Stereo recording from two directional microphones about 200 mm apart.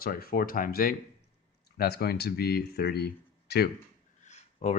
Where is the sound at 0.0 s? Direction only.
50° left (ahead or behind).